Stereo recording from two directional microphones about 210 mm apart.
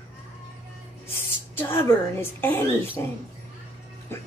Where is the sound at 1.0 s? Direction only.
10° left (ahead or behind).